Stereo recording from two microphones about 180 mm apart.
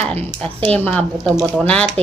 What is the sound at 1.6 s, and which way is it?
Speech, 5° left (ahead or behind).